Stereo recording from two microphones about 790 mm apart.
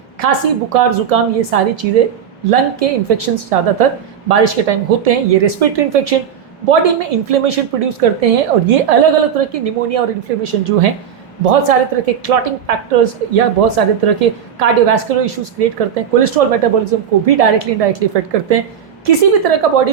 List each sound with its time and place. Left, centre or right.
0.2 s a woman's voice: right